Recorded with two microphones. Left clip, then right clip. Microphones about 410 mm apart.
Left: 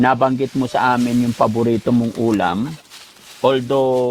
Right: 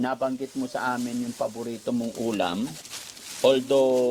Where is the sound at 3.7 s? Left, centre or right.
Left.